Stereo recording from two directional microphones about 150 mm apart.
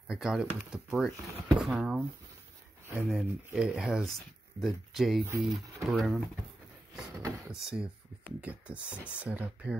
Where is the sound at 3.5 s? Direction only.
5° right (ahead or behind).